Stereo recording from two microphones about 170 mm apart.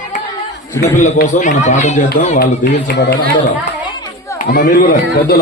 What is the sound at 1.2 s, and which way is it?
Speech, 45° left (ahead or behind).